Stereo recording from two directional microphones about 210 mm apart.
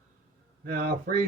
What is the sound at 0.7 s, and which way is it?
Speech, 50° right (ahead or behind).